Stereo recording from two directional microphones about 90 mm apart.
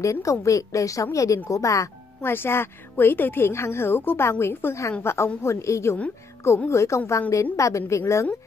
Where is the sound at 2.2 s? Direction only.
25° left (ahead or behind).